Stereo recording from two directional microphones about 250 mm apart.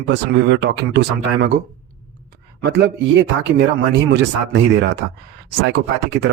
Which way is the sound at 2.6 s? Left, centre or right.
Right.